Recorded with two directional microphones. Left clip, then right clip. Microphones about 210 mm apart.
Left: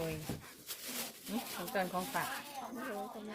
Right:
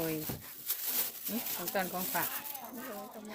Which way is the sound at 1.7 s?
50° right (ahead or behind).